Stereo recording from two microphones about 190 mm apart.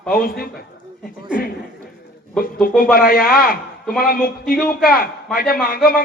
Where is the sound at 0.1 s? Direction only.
50° left (ahead or behind).